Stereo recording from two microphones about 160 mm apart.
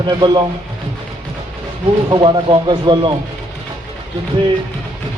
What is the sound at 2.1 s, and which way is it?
Speech, 30° right (ahead or behind).